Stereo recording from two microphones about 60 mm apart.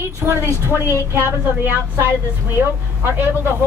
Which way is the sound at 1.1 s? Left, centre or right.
Right.